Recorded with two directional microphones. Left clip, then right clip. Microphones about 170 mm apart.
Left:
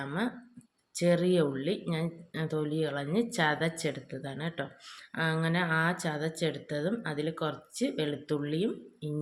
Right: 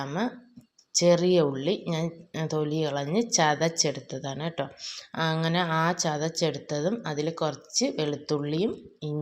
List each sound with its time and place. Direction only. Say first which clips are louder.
0.0 s a woman's voice: right 4 dB; 15° right (ahead or behind)